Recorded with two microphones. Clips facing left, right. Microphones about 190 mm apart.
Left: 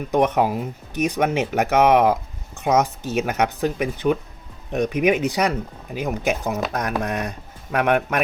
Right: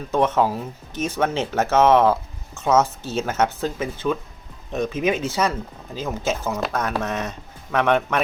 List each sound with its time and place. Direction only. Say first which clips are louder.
0.0 s speech: left 1 dB; 15° left (ahead or behind)